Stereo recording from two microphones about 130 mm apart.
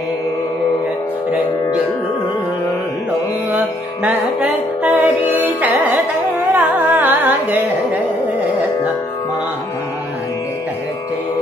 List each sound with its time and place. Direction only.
4.5 s music: 10° right (ahead or behind)
6.4 s carnatic music: 15° right (ahead or behind)